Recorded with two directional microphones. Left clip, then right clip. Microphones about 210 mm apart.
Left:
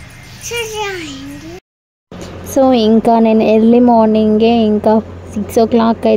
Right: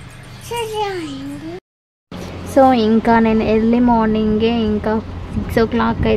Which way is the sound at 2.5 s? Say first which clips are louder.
Left 2 dB; 25° left (ahead or behind).